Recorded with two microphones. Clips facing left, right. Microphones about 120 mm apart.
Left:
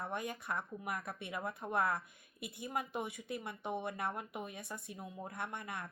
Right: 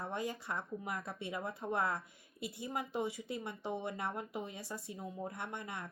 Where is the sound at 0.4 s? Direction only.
25° right (ahead or behind).